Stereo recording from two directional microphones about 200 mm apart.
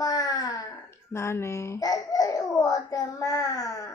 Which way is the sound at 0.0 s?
20° left (ahead or behind).